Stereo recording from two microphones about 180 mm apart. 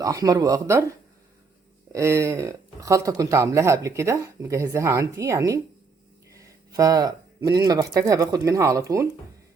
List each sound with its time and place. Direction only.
0.0 s speech: 20° right (ahead or behind)
1.9 s speech: 15° right (ahead or behind)